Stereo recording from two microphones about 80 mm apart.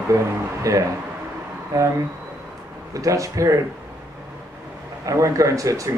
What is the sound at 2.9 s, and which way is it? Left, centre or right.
Speech, right.